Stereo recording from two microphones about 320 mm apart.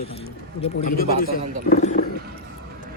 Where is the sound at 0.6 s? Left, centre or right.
Left.